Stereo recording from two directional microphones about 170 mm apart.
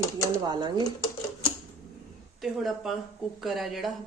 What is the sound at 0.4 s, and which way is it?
Speech, 25° right (ahead or behind).